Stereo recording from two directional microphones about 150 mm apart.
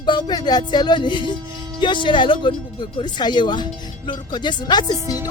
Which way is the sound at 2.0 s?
35° left (ahead or behind).